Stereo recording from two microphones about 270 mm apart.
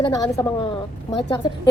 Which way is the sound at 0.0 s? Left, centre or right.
Centre.